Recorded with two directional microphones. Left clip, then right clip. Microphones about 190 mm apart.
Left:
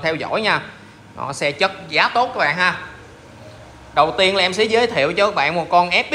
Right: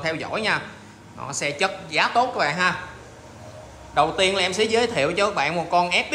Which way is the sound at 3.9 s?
15° right (ahead or behind).